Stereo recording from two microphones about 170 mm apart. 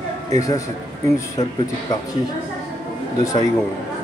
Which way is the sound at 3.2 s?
20° left (ahead or behind).